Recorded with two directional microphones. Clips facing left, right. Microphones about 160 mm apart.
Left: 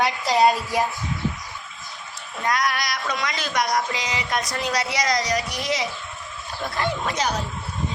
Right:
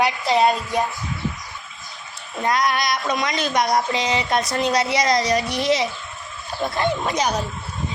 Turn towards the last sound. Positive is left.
turn(degrees=-15)  # may be behind; listen again after turning